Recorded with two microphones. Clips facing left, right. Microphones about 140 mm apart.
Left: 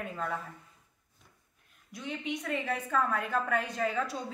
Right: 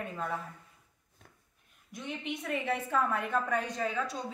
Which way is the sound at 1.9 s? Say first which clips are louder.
Left 2 dB; centre (ahead or behind).